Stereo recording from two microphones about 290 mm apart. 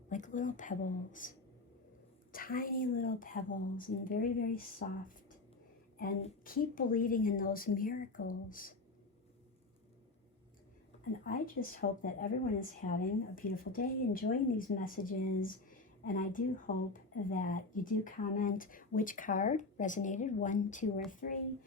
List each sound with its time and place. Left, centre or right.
0.1 s speech: left
2.3 s speech: left
6.0 s speech: left
11.3 s speech: left